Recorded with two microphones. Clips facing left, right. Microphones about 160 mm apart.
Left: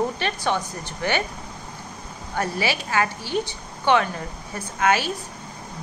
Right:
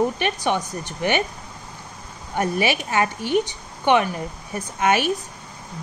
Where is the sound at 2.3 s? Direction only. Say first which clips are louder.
Right 3 dB; 15° right (ahead or behind).